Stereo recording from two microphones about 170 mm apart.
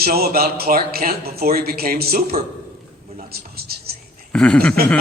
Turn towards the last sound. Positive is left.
turn(degrees=5)  # may be behind; listen again after turning